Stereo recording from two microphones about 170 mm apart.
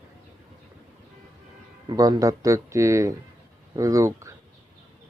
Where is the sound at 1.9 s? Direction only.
25° right (ahead or behind).